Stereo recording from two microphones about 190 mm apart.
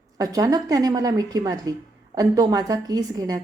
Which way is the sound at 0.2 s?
20° right (ahead or behind).